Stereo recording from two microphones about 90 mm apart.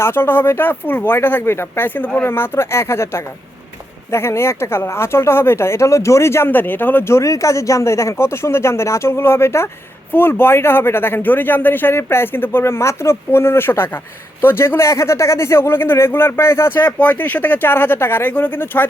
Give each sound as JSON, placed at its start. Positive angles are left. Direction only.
{"t": 0.0, "sound": "speech", "side_deg": 25}